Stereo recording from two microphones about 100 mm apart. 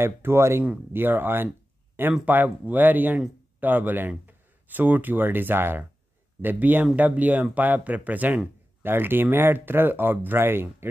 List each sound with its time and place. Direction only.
0.0 s speech: 25° right (ahead or behind)